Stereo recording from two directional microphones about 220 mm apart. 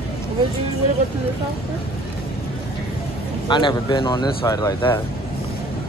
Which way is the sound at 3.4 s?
20° left (ahead or behind).